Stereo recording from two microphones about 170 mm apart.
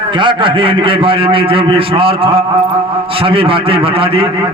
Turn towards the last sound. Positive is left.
turn(degrees=-35)  # may be behind; listen again after turning